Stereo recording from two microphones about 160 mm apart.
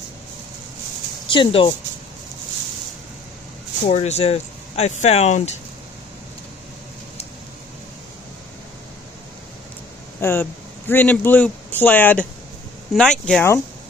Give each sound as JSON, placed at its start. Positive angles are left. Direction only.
{"t": 1.3, "sound": "speech", "side_deg": 30}
{"t": 3.9, "sound": "speech", "side_deg": 45}
{"t": 10.2, "sound": "speech", "side_deg": 15}